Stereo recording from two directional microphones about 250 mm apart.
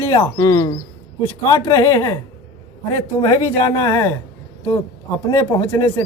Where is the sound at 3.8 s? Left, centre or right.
Centre.